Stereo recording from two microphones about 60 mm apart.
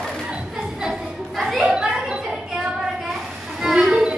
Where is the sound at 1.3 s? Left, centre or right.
Centre.